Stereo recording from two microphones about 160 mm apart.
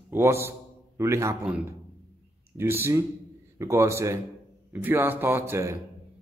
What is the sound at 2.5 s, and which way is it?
A man's voice, 15° right (ahead or behind).